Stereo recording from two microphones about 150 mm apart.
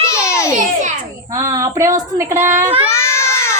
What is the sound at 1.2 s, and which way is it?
Speech, 20° right (ahead or behind).